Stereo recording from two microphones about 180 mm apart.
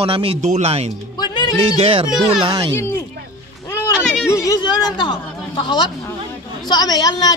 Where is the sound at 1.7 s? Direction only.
30° right (ahead or behind).